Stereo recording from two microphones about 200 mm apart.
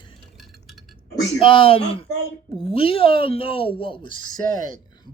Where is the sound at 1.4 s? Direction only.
25° left (ahead or behind).